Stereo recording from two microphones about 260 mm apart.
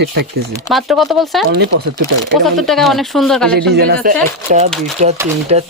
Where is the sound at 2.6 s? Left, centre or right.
Centre.